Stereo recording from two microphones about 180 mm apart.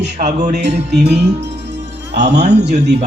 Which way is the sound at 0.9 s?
70° right (ahead or behind).